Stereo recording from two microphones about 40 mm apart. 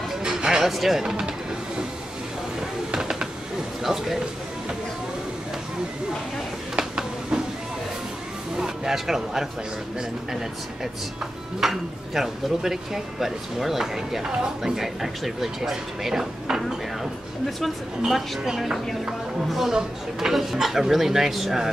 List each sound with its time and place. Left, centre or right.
0.2 s music: centre
0.7 s speech: centre
1.0 s speech: centre
2.9 s a sound: centre
3.8 s speech: centre
6.8 s a sound: centre
8.5 s speech: centre
11.6 s speech: centre
18.4 s speech: centre
19.7 s speech: centre